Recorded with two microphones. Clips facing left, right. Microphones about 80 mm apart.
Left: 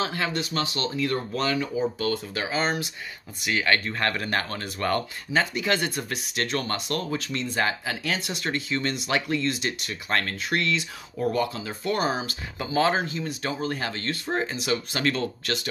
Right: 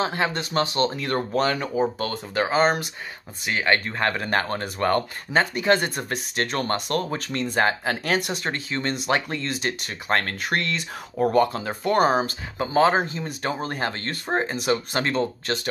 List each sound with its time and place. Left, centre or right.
0.0 s speech: right
3.4 s speech: right
12.5 s speech: right